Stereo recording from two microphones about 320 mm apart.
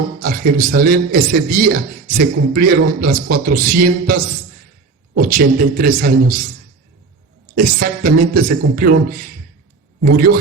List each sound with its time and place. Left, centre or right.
0.2 s a man's voice: right
7.5 s a man's voice: right